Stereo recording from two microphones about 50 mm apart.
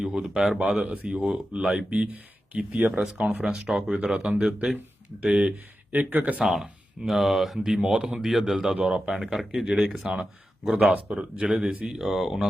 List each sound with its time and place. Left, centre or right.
0.0 s speech: centre
2.7 s speech: right
3.0 s speech: centre
5.9 s speech: right
6.4 s speech: centre
11.9 s speech: centre